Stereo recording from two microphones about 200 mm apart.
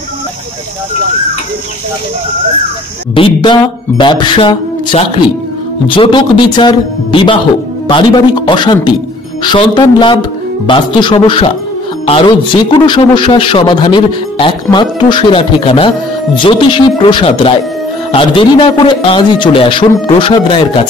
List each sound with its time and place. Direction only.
3.2 s speech: 25° left (ahead or behind)
12.8 s speech: 25° left (ahead or behind)